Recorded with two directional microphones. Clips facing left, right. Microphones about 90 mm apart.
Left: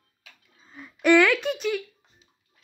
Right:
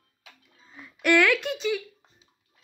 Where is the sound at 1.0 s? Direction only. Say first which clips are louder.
Left 3 dB; 10° left (ahead or behind).